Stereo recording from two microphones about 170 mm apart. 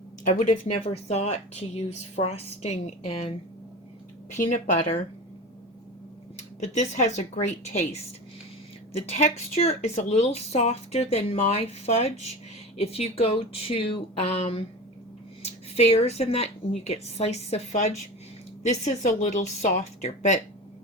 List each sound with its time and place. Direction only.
0.3 s a woman's voice: 45° left (ahead or behind)
0.7 s a woman's voice: 35° left (ahead or behind)
6.6 s speech: 45° left (ahead or behind)
8.9 s speech: 35° left (ahead or behind)
15.7 s a woman's voice: 35° left (ahead or behind)